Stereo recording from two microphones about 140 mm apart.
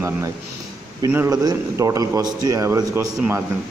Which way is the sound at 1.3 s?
25° right (ahead or behind).